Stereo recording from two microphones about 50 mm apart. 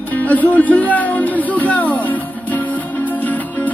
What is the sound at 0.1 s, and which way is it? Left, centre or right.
Music, left.